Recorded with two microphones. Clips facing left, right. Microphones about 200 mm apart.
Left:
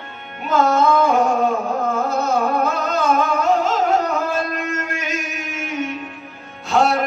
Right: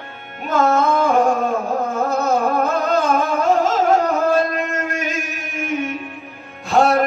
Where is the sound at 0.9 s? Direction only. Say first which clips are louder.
Even; 50° right (ahead or behind).